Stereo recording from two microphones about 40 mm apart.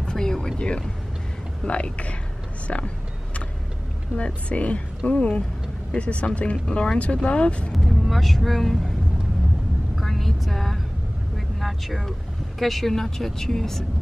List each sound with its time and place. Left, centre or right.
0.0 s a sound: centre
0.6 s speech: left
4.2 s speech: left
6.5 s speech: left
7.7 s speech: centre
9.9 s speech: centre